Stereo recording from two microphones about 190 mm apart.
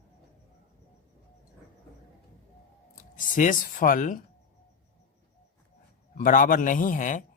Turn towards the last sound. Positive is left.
turn(degrees=45)  # may be behind; listen again after turning